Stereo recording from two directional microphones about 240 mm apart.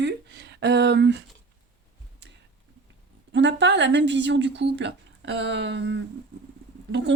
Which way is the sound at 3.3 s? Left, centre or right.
Right.